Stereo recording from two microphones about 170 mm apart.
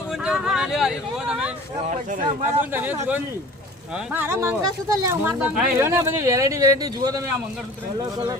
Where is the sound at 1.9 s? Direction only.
50° right (ahead or behind).